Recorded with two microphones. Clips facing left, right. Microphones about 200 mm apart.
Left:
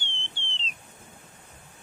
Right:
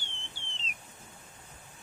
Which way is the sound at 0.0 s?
30° left (ahead or behind).